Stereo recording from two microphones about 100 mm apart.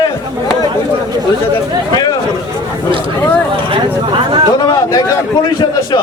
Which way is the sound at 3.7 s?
55° right (ahead or behind).